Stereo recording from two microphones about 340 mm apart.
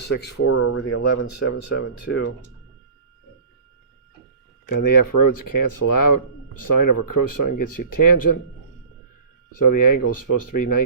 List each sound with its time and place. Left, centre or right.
0.1 s speech: left
4.6 s speech: left
9.6 s speech: left